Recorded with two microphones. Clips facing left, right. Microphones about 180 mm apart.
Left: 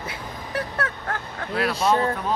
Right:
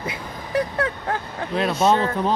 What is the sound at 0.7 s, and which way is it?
Speech, 15° right (ahead or behind).